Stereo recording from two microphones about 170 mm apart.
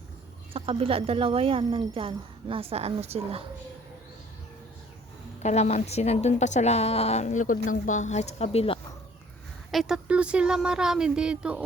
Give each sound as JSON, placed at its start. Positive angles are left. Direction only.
{"t": 0.5, "sound": "a woman's voice", "side_deg": -35}
{"t": 5.4, "sound": "a woman's voice", "side_deg": 40}
{"t": 9.7, "sound": "speech", "side_deg": -5}